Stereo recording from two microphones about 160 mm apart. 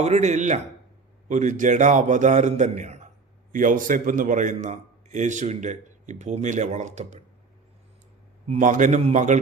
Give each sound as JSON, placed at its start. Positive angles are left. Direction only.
{"t": 0.0, "sound": "a man's voice", "side_deg": -45}
{"t": 8.4, "sound": "a man's voice", "side_deg": -50}